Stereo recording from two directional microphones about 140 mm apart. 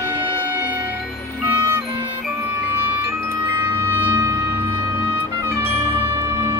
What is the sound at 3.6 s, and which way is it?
Music, 15° right (ahead or behind).